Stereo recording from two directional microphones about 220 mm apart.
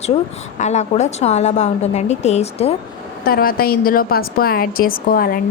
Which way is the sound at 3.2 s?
45° left (ahead or behind).